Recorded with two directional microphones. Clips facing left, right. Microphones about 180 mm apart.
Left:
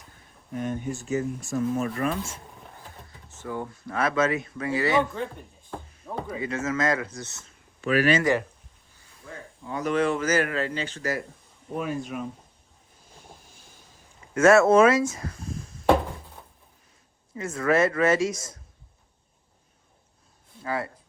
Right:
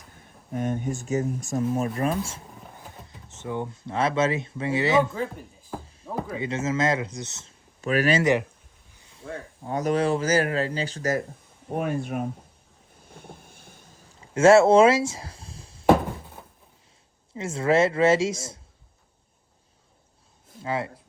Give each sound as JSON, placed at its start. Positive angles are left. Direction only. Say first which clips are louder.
{"t": 0.6, "sound": "speech", "louder": "right 2 dB", "side_deg": -45}
{"t": 2.7, "sound": "speech", "louder": "right 2 dB", "side_deg": -20}
{"t": 5.1, "sound": "speech", "louder": "right 2 dB", "side_deg": -5}
{"t": 6.1, "sound": "a sound", "louder": "right 2 dB", "side_deg": -5}
{"t": 6.3, "sound": "speech", "louder": "right 1 dB", "side_deg": -25}
{"t": 7.8, "sound": "speech", "louder": "left 1 dB", "side_deg": -40}
{"t": 8.2, "sound": "speech", "louder": "right 2 dB", "side_deg": -20}
{"t": 9.6, "sound": "speech", "louder": "right 1 dB", "side_deg": -40}
{"t": 11.8, "sound": "speech", "louder": "right 3 dB", "side_deg": -55}
{"t": 13.1, "sound": "vehicle", "louder": "right 5 dB", "side_deg": -60}
{"t": 14.2, "sound": "speech", "louder": "right 2 dB", "side_deg": -30}
{"t": 17.3, "sound": "speech", "louder": "right 2 dB", "side_deg": -25}
{"t": 20.6, "sound": "speech", "louder": "right 1 dB", "side_deg": -20}